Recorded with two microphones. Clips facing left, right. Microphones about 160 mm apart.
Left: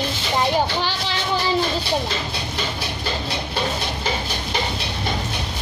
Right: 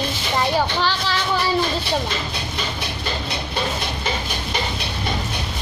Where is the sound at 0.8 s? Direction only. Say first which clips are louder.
Right 2 dB; 15° left (ahead or behind).